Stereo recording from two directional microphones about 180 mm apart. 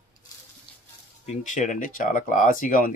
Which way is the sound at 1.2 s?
45° left (ahead or behind).